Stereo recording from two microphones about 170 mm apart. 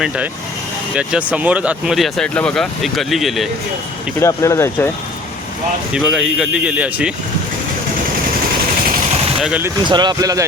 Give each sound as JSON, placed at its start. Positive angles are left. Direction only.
{"t": 0.9, "sound": "speech", "side_deg": -5}
{"t": 4.2, "sound": "speech", "side_deg": 15}
{"t": 5.9, "sound": "speech", "side_deg": -5}
{"t": 9.4, "sound": "speech", "side_deg": -10}
{"t": 9.8, "sound": "speech", "side_deg": -25}